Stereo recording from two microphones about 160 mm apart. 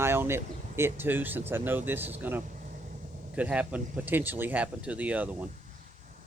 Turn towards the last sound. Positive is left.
turn(degrees=-10)  # may be behind; listen again after turning